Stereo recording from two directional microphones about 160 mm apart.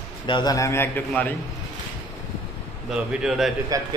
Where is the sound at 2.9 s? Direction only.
5° right (ahead or behind).